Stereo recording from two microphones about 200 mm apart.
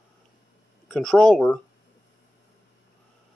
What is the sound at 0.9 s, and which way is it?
Speech, 5° left (ahead or behind).